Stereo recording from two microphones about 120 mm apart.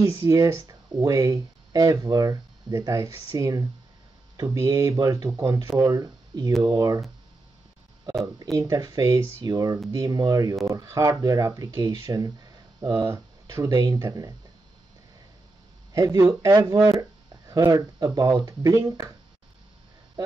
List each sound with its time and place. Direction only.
0.1 s speech: 30° right (ahead or behind)
8.5 s speech: 30° right (ahead or behind)
15.9 s speech: 30° right (ahead or behind)